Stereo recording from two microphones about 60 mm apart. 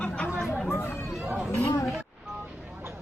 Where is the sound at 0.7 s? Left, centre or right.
Left.